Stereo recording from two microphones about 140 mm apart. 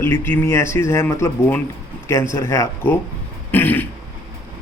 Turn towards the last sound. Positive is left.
turn(degrees=15)  # may be behind; listen again after turning